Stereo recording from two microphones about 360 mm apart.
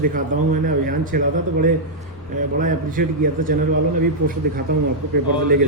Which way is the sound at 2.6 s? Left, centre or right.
Right.